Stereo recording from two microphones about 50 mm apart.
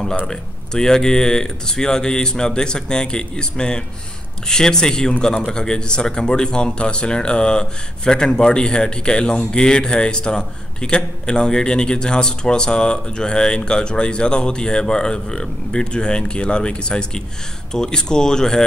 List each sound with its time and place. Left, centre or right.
0.3 s speech: centre